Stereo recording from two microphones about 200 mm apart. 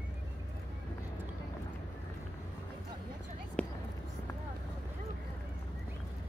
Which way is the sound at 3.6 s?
5° left (ahead or behind).